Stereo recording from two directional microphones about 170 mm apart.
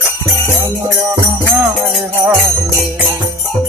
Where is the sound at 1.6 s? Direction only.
Centre (ahead or behind).